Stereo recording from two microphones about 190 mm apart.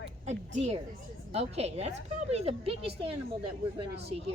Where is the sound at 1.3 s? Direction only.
35° right (ahead or behind).